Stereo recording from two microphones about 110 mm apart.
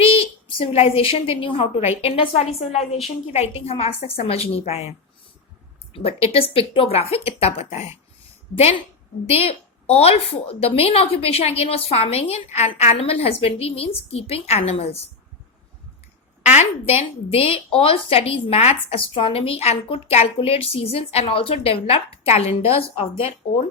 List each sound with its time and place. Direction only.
0.0 s a woman's voice: 60° left (ahead or behind)
5.9 s a woman's voice: 60° left (ahead or behind); by 7.9 s 80° left
9.2 s a woman's voice: 65° left (ahead or behind)
16.4 s a woman's voice: 85° left; by 23.6 s 60° left (ahead or behind)